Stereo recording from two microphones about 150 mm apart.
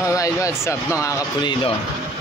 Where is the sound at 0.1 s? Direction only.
20° left (ahead or behind).